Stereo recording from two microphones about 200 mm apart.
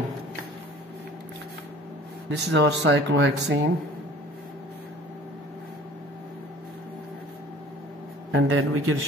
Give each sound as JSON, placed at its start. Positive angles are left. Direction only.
{"t": 2.2, "sound": "speech", "side_deg": -60}
{"t": 8.3, "sound": "a man's voice", "side_deg": -80}